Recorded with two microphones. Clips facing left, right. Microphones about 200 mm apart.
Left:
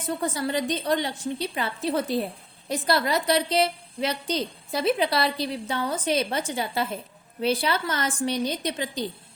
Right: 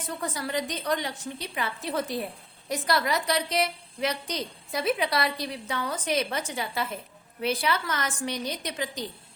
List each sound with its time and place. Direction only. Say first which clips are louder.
0.2 s a woman's voice: left 2 dB; 30° left (ahead or behind)